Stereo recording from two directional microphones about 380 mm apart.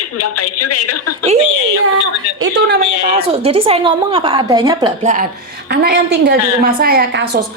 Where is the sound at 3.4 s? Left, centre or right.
Centre.